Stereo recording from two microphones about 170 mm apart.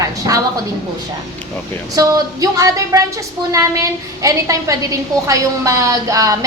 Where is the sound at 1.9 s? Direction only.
20° right (ahead or behind).